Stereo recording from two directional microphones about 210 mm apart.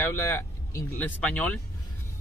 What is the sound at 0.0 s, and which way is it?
Speech, 10° left (ahead or behind).